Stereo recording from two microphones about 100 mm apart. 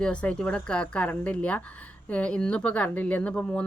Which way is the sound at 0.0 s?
10° left (ahead or behind).